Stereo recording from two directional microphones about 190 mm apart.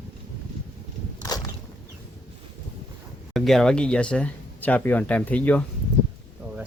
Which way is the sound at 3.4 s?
Centre (ahead or behind).